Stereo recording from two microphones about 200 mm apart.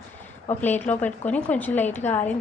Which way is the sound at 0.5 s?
10° left (ahead or behind).